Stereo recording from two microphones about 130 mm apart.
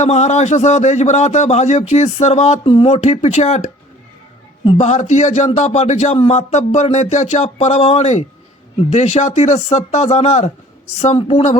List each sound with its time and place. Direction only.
0.0 s a man's voice: 65° left (ahead or behind)
4.8 s a man's voice: 65° left (ahead or behind)
11.1 s speech: 45° left (ahead or behind)